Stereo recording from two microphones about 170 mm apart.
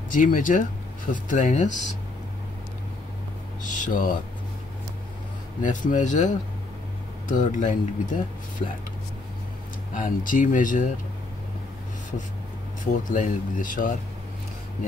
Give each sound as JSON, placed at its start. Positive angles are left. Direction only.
{"t": 0.1, "sound": "speech", "side_deg": 50}
{"t": 3.6, "sound": "speech", "side_deg": 50}
{"t": 5.6, "sound": "speech", "side_deg": 50}
{"t": 9.9, "sound": "speech", "side_deg": 50}
{"t": 13.1, "sound": "speech", "side_deg": 50}